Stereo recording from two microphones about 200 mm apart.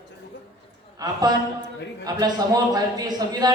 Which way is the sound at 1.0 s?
20° right (ahead or behind).